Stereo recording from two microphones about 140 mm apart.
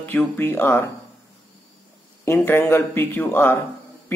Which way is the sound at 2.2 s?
15° left (ahead or behind).